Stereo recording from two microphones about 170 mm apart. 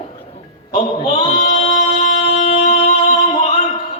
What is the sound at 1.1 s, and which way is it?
Singing, 40° left (ahead or behind).